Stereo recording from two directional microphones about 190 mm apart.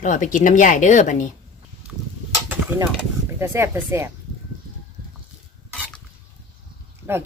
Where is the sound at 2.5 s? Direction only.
10° right (ahead or behind).